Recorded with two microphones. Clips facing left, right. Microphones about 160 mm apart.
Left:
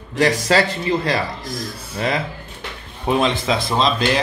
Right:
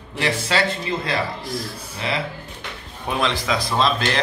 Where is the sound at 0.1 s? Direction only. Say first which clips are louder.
Left 6 dB; 40° left (ahead or behind).